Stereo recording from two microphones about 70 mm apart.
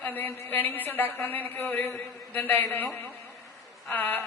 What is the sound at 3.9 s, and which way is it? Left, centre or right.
Speech, left.